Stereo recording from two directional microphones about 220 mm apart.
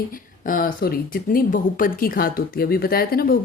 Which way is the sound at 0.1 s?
40° left (ahead or behind).